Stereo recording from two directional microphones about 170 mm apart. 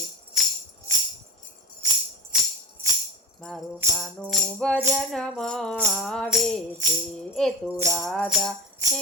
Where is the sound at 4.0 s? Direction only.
Centre (ahead or behind).